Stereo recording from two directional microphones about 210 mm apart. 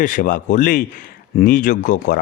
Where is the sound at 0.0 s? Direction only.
40° left (ahead or behind).